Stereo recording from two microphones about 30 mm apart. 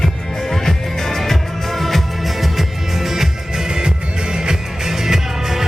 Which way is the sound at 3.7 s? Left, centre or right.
Right.